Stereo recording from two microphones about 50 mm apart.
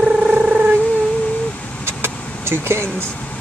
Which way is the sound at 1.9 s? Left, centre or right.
Right.